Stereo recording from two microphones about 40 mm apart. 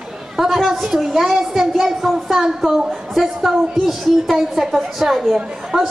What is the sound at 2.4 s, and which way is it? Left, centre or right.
A woman's voice, centre.